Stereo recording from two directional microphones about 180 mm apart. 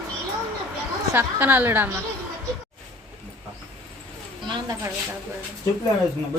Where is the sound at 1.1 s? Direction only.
10° right (ahead or behind).